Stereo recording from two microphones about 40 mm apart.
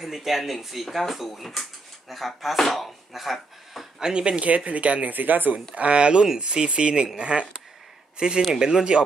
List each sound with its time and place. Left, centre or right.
0.0 s speech: centre
4.0 s speech: right
4.5 s speech: right
5.1 s speech: right
5.8 s speech: right